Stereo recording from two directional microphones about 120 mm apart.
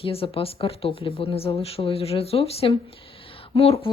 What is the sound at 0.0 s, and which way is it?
Speech, 50° left (ahead or behind).